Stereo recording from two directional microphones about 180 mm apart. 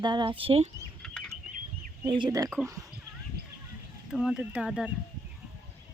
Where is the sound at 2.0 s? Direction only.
25° right (ahead or behind).